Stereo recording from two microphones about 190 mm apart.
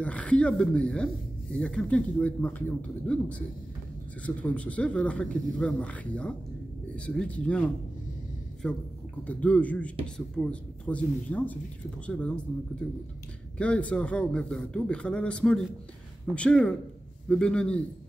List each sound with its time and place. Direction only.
0.0 s a man's voice: 5° left (ahead or behind)
13.6 s speech: 5° left (ahead or behind)